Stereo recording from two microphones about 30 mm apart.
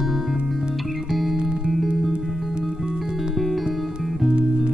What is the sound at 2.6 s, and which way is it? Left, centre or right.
Music, centre.